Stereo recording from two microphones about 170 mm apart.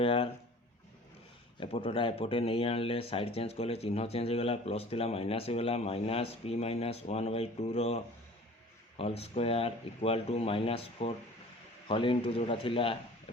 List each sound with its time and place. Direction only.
0.0 s speech: 35° left (ahead or behind)
1.5 s speech: 35° left (ahead or behind)